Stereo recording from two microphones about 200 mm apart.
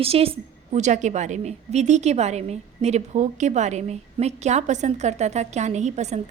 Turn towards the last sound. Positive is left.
turn(degrees=-35)  # may be behind; listen again after turning